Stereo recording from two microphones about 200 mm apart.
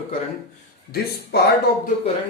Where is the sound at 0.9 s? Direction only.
55° left (ahead or behind).